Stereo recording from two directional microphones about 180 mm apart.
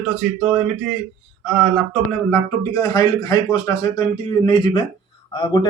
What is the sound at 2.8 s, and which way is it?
A man's voice, 20° left (ahead or behind).